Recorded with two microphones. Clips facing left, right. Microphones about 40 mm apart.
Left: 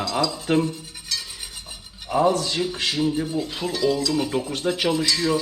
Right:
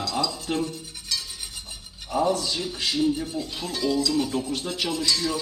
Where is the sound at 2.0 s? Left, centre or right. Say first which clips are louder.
Left 4 dB; left.